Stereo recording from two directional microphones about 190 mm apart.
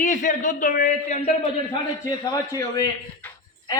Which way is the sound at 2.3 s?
20° left (ahead or behind).